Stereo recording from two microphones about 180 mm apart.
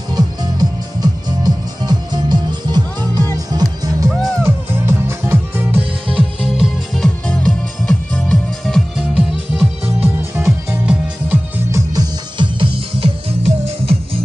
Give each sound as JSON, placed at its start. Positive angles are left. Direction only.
{"t": 0.1, "sound": "music", "side_deg": -20}